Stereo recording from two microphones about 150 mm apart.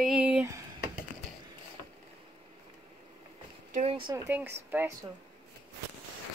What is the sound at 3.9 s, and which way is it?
Speech, 30° right (ahead or behind).